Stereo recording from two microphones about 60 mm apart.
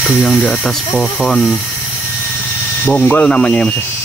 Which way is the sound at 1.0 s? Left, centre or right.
Centre.